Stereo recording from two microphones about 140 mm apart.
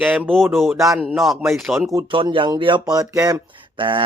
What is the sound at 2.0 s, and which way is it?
Speech, 35° right (ahead or behind).